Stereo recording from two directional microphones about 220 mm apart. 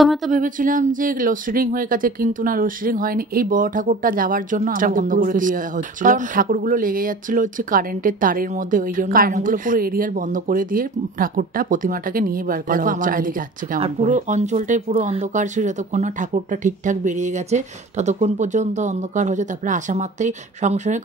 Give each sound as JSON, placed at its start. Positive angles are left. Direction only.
{"t": 0.3, "sound": "speech", "side_deg": -35}
{"t": 13.7, "sound": "speech", "side_deg": -30}